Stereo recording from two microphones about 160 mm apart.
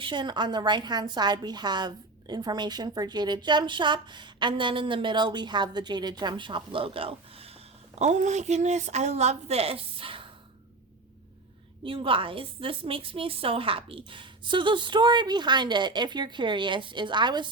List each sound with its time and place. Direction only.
0.0 s a woman's voice: 30° right (ahead or behind)
7.9 s a woman's voice: 45° right (ahead or behind)
11.8 s a woman's voice: 35° right (ahead or behind)